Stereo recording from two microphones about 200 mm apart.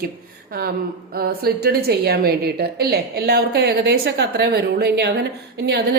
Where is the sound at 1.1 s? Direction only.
50° right (ahead or behind).